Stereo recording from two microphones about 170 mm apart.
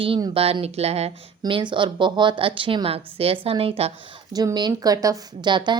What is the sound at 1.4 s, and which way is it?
Speech, 25° right (ahead or behind).